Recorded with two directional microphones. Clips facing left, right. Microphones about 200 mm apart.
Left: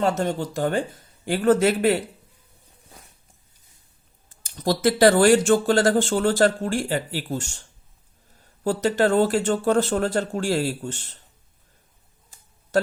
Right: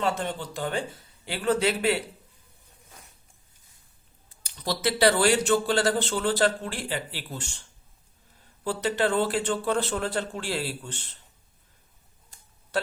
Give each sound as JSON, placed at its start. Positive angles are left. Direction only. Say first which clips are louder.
{"t": 0.0, "sound": "speech", "louder": "left 6 dB", "side_deg": 45}
{"t": 4.3, "sound": "speech", "louder": "left 7 dB", "side_deg": 45}
{"t": 8.6, "sound": "speech", "louder": "left 5 dB", "side_deg": 45}